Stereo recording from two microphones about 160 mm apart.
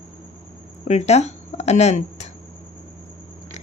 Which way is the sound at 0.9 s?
45° left (ahead or behind).